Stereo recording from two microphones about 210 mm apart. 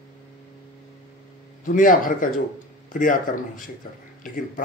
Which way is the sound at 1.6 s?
40° left (ahead or behind).